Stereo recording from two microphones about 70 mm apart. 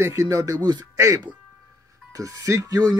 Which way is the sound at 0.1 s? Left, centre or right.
Right.